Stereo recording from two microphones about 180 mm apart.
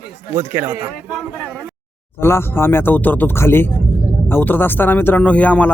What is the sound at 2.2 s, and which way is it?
Speech, 15° left (ahead or behind).